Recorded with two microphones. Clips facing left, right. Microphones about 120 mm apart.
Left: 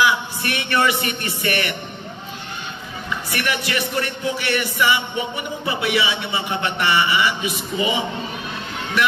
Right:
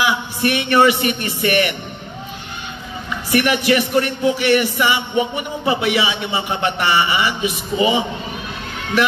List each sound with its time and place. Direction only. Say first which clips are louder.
0.0 s speech: right 1 dB; 20° right (ahead or behind)
3.3 s speech: right 10 dB; 20° right (ahead or behind)